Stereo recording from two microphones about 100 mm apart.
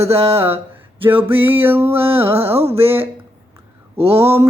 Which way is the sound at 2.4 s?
85° right.